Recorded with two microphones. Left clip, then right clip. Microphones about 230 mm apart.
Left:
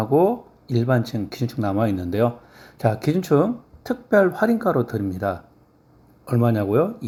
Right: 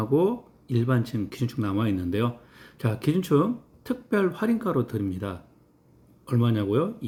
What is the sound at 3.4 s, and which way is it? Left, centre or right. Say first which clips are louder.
Speech: left 5 dB; centre.